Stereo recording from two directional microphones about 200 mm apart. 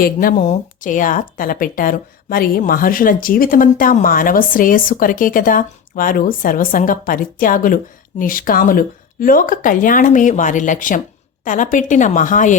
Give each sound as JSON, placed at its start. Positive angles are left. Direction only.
{"t": 0.0, "sound": "a woman's voice", "side_deg": 45}